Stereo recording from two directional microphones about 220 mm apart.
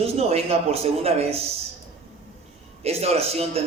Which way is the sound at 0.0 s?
30° right (ahead or behind).